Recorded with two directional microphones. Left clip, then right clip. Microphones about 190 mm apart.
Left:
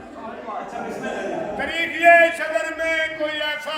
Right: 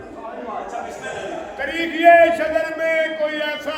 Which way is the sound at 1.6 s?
25° left (ahead or behind).